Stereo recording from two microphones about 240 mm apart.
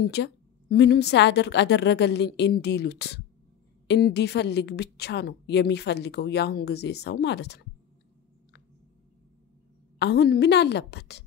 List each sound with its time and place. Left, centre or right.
0.0 s a woman's voice: left
9.9 s a woman's voice: left